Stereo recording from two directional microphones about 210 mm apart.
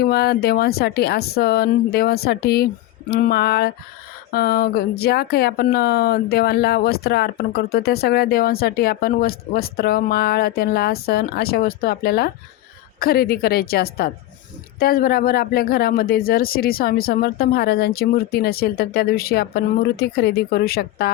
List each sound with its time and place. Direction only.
0.0 s speech: 50° left (ahead or behind)